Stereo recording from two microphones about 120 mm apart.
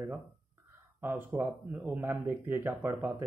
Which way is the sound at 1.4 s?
15° right (ahead or behind).